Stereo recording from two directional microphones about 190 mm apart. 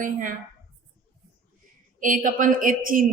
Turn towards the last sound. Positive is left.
turn(degrees=-45)  # may be behind; listen again after turning